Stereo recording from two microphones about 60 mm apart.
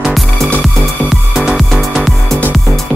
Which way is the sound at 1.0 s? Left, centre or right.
Centre.